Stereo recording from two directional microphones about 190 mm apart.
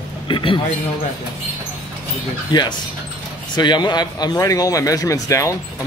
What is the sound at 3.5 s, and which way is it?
Speech, 25° left (ahead or behind).